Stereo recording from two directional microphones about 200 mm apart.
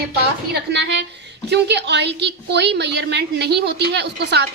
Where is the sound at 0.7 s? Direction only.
60° right (ahead or behind).